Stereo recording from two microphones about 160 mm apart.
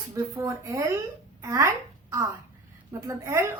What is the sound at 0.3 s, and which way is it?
A woman's voice, 20° right (ahead or behind).